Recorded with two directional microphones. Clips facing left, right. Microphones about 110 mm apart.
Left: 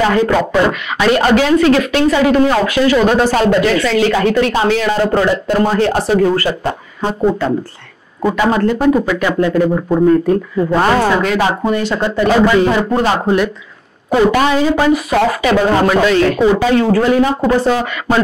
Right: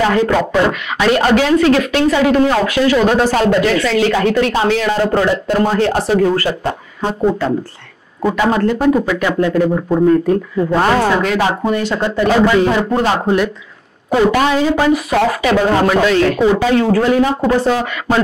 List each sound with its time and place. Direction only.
0.0 s speech: 20° left (ahead or behind)
8.5 s speech: 15° left (ahead or behind)
10.9 s speech: 30° left (ahead or behind)
11.2 s speech: 20° left (ahead or behind)